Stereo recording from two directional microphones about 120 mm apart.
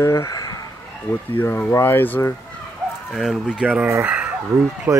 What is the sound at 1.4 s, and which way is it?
Speech, 15° left (ahead or behind).